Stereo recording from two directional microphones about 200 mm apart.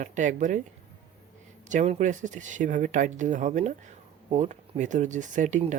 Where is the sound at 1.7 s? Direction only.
35° right (ahead or behind).